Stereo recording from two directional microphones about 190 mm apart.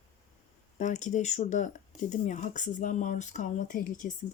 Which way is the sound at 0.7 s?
40° left (ahead or behind).